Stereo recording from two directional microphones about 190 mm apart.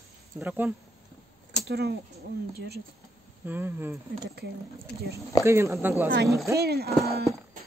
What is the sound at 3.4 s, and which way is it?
Speech, 10° right (ahead or behind).